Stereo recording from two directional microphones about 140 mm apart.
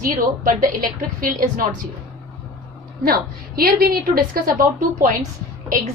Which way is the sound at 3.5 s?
90° right.